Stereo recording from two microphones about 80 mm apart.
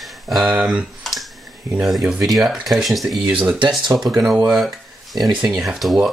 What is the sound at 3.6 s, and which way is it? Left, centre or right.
Speech, right.